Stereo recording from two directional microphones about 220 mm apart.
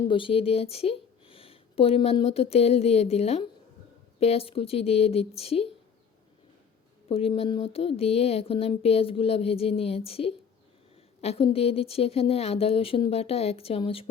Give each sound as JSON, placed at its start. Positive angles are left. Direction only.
{"t": 0.1, "sound": "speech", "side_deg": 25}
{"t": 7.1, "sound": "speech", "side_deg": 25}